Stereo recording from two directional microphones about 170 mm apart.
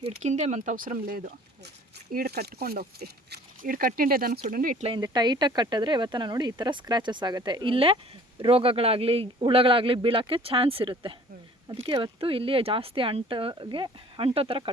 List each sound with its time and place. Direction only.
0.2 s speech: 40° right (ahead or behind)
2.1 s speech: 70° right (ahead or behind)
4.9 s speech: 25° right (ahead or behind)